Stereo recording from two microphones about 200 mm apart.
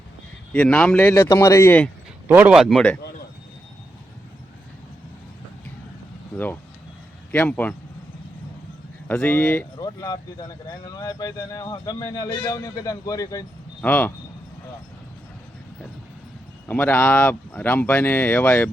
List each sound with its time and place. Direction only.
0.5 s speech: 5° left (ahead or behind)
2.2 s speech: 10° right (ahead or behind)
6.3 s speech: 10° left (ahead or behind)
9.0 s speech: 10° left (ahead or behind)
16.6 s speech: 10° left (ahead or behind)